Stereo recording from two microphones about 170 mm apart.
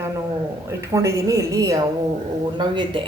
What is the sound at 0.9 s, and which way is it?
A woman's voice, 20° right (ahead or behind).